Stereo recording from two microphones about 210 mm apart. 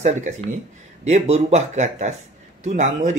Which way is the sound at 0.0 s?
35° right (ahead or behind).